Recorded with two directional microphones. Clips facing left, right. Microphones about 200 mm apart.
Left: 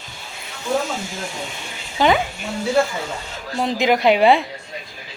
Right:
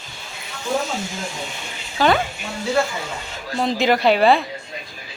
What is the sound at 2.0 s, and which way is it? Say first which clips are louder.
Speech: left 1 dB; 20° left (ahead or behind).